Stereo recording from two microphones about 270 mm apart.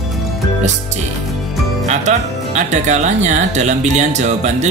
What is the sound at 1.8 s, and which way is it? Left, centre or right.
Speech, right.